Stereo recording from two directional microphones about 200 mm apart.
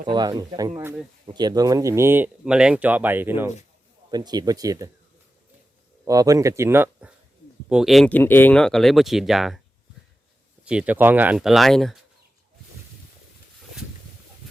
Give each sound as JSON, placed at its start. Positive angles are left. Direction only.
{"t": 0.0, "sound": "speech", "side_deg": -20}
{"t": 6.1, "sound": "speech", "side_deg": -15}
{"t": 10.6, "sound": "speech", "side_deg": -5}